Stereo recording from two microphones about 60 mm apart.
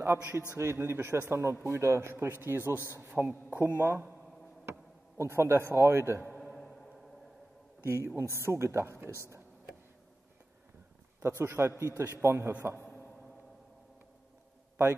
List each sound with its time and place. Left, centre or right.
0.0 s a man's voice: right
4.6 s a man's voice: right
7.8 s a man's voice: right
11.1 s a man's voice: right